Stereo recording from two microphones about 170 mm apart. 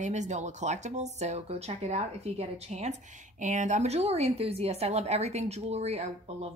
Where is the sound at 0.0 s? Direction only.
45° right (ahead or behind).